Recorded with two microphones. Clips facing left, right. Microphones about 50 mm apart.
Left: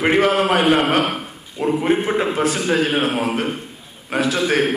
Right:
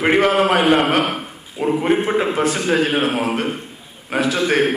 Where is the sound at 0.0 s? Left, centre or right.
Centre.